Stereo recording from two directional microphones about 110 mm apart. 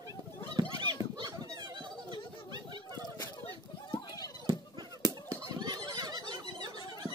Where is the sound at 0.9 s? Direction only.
45° right (ahead or behind).